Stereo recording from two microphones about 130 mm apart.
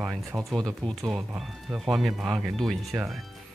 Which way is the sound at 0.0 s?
Centre (ahead or behind).